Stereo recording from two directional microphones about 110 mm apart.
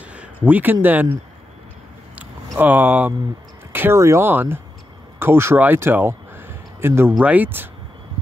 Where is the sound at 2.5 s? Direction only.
15° right (ahead or behind).